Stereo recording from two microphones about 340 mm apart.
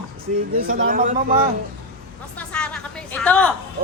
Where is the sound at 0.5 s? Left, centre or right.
Right.